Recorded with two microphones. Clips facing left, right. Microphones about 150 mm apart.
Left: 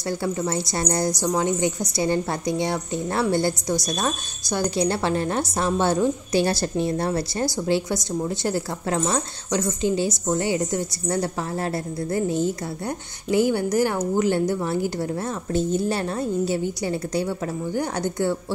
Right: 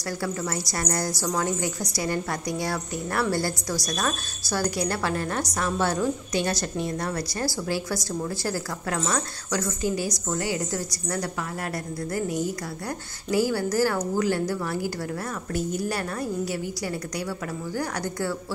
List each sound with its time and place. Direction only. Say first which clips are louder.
0.2 s a woman's voice: left 4 dB; 25° left (ahead or behind)